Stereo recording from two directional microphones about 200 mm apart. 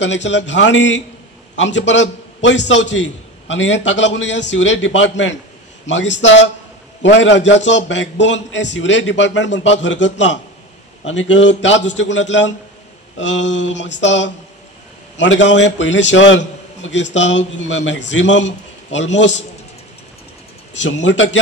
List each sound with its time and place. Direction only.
0.0 s a man's voice: 65° left (ahead or behind)
20.8 s a man's voice: 65° left (ahead or behind)